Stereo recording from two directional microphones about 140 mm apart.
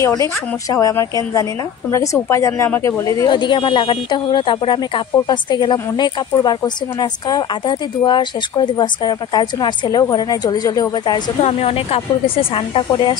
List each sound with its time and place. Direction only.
0.0 s a woman's voice: 25° left (ahead or behind)
11.4 s a woman's voice: 45° left (ahead or behind)